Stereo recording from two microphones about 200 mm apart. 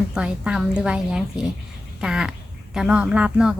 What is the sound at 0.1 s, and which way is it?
Speech, 5° right (ahead or behind).